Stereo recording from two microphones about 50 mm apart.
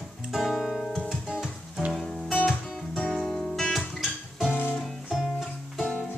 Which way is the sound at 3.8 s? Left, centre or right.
Centre.